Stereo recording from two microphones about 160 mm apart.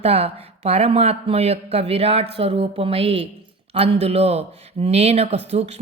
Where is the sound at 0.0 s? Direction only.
40° right (ahead or behind).